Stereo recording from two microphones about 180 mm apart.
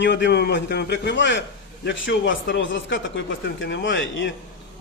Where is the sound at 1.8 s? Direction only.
90° left.